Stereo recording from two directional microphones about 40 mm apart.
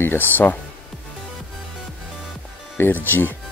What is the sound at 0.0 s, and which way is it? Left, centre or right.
Speech, left.